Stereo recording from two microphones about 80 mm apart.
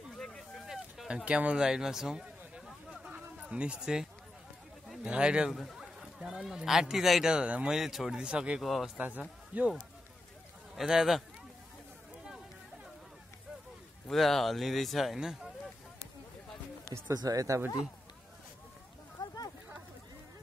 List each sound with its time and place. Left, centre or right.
0.2 s a sound: centre
4.8 s speech: centre
5.5 s speech: centre
8.6 s speech: centre
8.9 s speech: centre
10.8 s speech: centre
14.1 s speech: centre
15.1 s speech: centre
17.1 s speech: right
19.1 s a sound: left